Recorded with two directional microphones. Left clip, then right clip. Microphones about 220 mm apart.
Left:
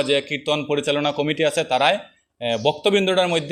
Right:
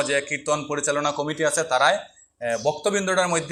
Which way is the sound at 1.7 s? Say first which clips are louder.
Left 1 dB; 65° left (ahead or behind).